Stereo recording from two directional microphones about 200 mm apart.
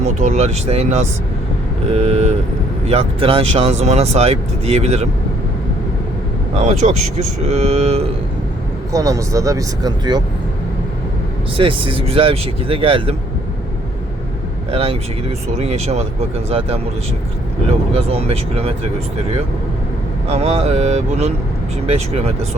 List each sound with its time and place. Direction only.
0.0 s speech: 35° right (ahead or behind)
6.6 s speech: 35° right (ahead or behind)
8.9 s speech: 15° right (ahead or behind)
11.5 s speech: 25° right (ahead or behind)
14.7 s speech: 30° right (ahead or behind)
20.2 s speech: 30° right (ahead or behind)